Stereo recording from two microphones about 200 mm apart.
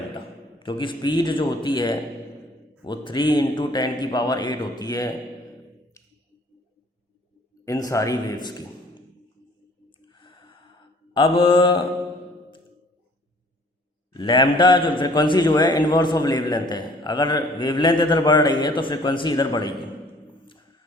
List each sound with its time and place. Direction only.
0.1 s a man's voice: 25° left (ahead or behind)
7.6 s a man's voice: 15° left (ahead or behind)
10.1 s gasp: 25° left (ahead or behind)
11.1 s a man's voice: 25° left (ahead or behind)
14.1 s a man's voice: 20° left (ahead or behind)